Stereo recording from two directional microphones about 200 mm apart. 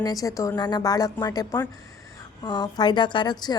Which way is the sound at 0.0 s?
15° left (ahead or behind).